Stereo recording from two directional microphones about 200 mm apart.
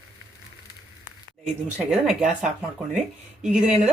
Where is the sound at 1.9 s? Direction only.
5° right (ahead or behind).